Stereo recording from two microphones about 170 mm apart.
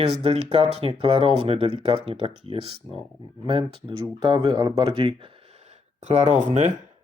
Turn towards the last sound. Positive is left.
turn(degrees=-45)  # may be behind; listen again after turning